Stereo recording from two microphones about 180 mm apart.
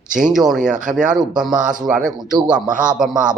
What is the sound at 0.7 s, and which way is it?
Speech, 45° right (ahead or behind).